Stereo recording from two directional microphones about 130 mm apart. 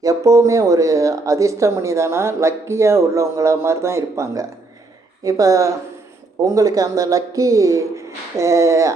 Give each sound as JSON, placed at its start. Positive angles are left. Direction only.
{"t": 0.0, "sound": "speech", "side_deg": -25}